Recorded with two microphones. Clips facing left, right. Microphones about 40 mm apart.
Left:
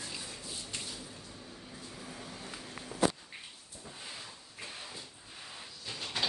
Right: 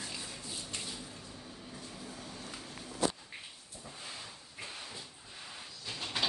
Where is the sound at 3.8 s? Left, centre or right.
Centre.